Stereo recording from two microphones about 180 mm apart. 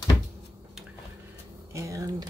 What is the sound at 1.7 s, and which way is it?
Speech, 15° right (ahead or behind).